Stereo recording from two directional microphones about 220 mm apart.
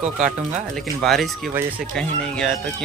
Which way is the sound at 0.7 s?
Centre (ahead or behind).